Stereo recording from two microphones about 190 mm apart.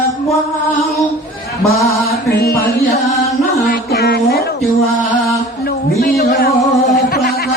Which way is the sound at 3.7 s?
55° left (ahead or behind).